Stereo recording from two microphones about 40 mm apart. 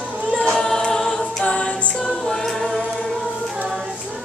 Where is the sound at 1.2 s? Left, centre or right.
Left.